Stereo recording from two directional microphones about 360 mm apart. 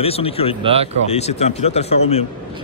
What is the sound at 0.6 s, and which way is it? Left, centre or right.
Speech, centre.